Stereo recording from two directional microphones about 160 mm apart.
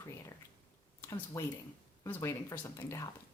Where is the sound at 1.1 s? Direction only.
20° left (ahead or behind).